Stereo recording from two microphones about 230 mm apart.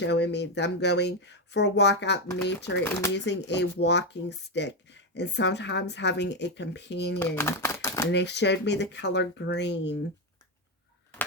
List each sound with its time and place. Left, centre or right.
0.0 s speech: left
2.8 s speech: centre
3.2 s speech: left
7.2 s speech: centre
8.1 s speech: left